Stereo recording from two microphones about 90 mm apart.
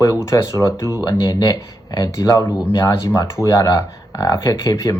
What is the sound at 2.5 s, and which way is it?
Speech, 30° left (ahead or behind).